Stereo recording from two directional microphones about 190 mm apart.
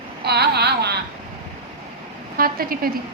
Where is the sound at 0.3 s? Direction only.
60° right (ahead or behind).